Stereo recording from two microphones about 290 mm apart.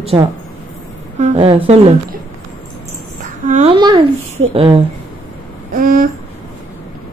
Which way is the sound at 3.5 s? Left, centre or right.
Centre.